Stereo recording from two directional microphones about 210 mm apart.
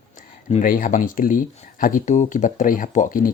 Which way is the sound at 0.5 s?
40° left (ahead or behind).